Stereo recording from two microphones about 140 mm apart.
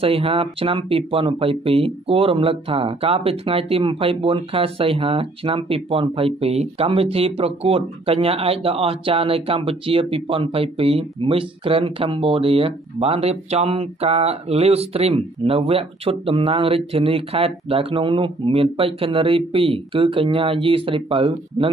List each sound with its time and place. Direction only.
0.0 s speech: 40° right (ahead or behind)